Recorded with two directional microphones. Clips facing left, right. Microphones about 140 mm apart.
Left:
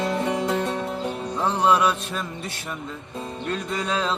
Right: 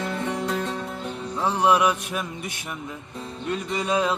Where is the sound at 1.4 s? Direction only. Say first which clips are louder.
Even; 10° right (ahead or behind).